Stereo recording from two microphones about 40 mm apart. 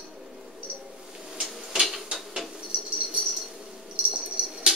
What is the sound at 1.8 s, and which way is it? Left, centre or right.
Dishes, centre.